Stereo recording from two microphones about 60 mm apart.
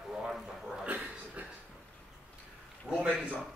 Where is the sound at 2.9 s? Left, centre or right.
Centre.